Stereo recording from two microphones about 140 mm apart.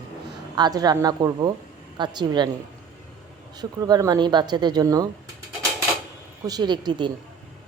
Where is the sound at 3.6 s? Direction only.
30° right (ahead or behind).